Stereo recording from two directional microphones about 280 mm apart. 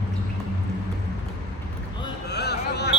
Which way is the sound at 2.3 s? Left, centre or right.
Left.